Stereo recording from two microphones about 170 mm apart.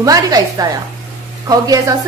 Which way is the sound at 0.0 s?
20° right (ahead or behind).